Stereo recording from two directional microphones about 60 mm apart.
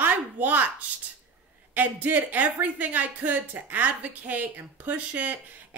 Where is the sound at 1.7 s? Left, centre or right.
Right.